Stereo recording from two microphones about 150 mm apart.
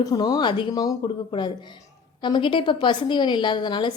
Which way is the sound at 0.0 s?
25° left (ahead or behind).